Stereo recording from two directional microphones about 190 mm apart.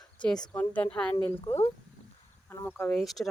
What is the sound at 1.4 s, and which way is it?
Speech, 30° left (ahead or behind).